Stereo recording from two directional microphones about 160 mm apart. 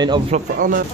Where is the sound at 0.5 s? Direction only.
60° right (ahead or behind).